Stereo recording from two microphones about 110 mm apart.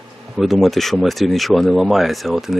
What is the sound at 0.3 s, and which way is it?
Speech, centre (ahead or behind).